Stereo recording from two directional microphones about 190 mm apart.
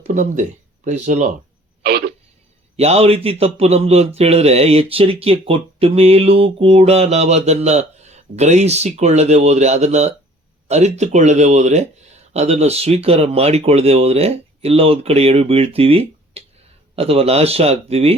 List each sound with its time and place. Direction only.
0.0 s speech: 40° right (ahead or behind)
1.8 s a sound: 55° right (ahead or behind)
2.7 s speech: 30° right (ahead or behind)